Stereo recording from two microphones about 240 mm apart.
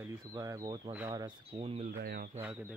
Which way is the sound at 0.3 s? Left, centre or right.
Centre.